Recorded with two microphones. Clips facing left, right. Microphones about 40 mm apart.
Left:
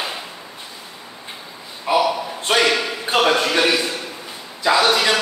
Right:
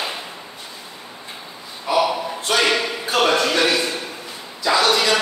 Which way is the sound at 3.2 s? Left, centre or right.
Centre.